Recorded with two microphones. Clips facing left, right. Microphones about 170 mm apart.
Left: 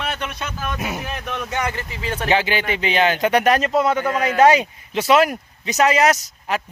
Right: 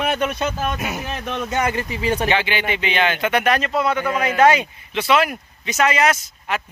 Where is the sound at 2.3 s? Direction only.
40° left (ahead or behind).